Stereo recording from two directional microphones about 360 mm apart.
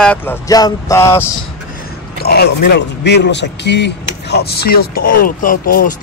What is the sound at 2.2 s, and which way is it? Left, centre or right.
Speech, left.